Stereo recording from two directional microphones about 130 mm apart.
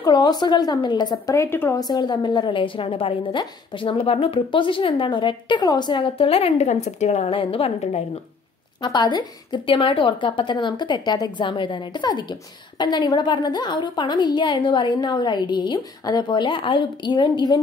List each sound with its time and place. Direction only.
0.0 s a woman's voice: 30° left (ahead or behind)
1.8 s a woman's voice: 35° left (ahead or behind); by 7.3 s 60° left (ahead or behind)
7.3 s a woman's voice: 45° left (ahead or behind)
8.8 s a woman's voice: 35° left (ahead or behind)